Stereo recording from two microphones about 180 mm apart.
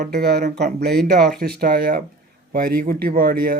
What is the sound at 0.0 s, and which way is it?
Speech, 65° right (ahead or behind).